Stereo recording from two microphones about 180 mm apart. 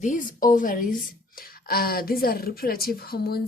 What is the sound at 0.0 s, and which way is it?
A woman's voice, 45° left (ahead or behind).